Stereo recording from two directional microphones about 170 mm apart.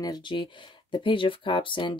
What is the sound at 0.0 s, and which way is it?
Speech, 25° left (ahead or behind).